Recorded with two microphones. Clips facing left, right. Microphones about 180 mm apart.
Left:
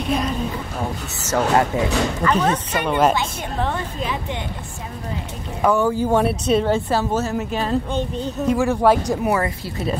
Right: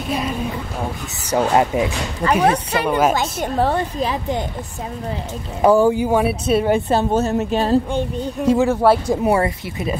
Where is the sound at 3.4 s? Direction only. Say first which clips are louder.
Right 6 dB; 40° right (ahead or behind).